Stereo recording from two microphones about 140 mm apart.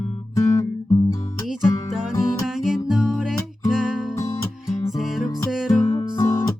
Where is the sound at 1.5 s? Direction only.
Centre (ahead or behind).